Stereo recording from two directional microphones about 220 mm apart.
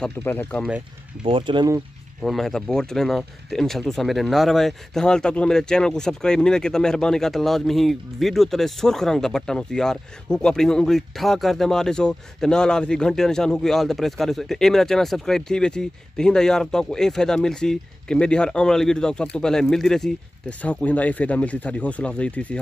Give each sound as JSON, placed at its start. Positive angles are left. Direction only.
{"t": 0.0, "sound": "speech", "side_deg": 10}
{"t": 1.2, "sound": "speech", "side_deg": -20}
{"t": 2.2, "sound": "speech", "side_deg": 0}